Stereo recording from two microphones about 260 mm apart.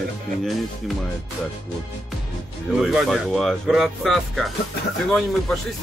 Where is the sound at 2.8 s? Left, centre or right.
Centre.